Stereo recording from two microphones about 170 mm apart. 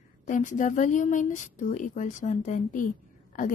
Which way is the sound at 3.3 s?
50° left (ahead or behind).